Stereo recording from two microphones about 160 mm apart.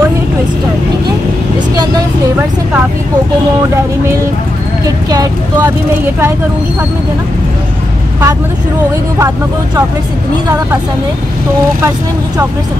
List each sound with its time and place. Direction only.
4.8 s speech: 25° right (ahead or behind)